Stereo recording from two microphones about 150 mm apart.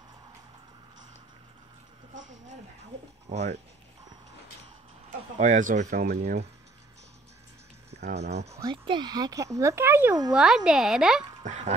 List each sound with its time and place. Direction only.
3.3 s goose: 50° right (ahead or behind)
5.4 s speech: 55° right (ahead or behind); by 6.4 s 90° right
8.0 s speech: 90° right
8.8 s speech: 30° right (ahead or behind)
10.3 s speech: 5° right (ahead or behind)
11.4 s goose: 50° right (ahead or behind)